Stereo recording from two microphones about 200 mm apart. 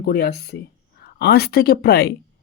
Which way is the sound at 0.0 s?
50° left (ahead or behind).